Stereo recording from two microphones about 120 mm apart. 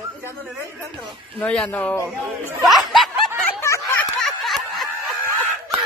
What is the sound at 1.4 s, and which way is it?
Speech, 5° left (ahead or behind).